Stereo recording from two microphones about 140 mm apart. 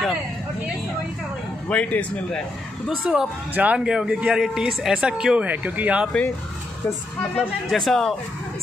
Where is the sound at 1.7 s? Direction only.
10° left (ahead or behind).